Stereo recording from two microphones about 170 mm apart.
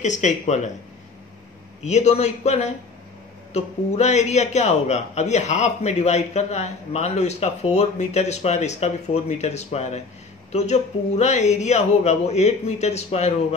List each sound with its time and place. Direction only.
0.0 s speech: 45° left (ahead or behind)
1.9 s a man's voice: 40° left (ahead or behind)